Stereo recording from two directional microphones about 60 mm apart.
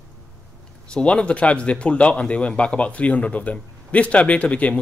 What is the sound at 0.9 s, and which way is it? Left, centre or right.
A man's voice, centre.